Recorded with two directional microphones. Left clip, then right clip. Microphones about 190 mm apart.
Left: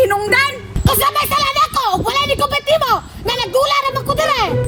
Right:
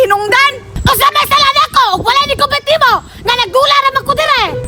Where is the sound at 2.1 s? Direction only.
Centre (ahead or behind).